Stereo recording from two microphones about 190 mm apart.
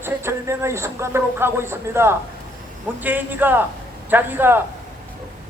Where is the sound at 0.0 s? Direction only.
15° right (ahead or behind).